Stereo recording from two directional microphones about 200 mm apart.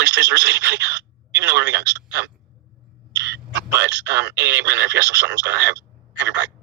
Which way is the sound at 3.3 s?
60° right (ahead or behind).